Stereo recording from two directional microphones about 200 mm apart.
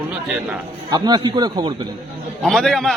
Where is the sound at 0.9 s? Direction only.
20° right (ahead or behind).